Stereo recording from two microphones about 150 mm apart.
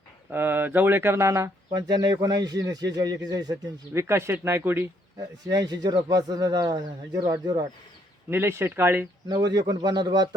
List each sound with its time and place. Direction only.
0.3 s speech: 15° right (ahead or behind)
5.5 s speech: 25° right (ahead or behind)
8.3 s speech: 15° right (ahead or behind)
9.3 s speech: 25° right (ahead or behind)